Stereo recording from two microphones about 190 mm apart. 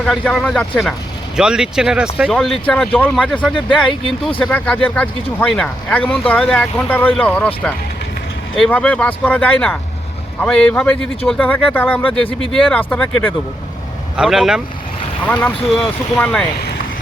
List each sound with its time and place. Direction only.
0.0 s speech: centre (ahead or behind)